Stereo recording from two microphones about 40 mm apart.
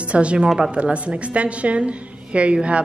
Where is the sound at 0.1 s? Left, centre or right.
Right.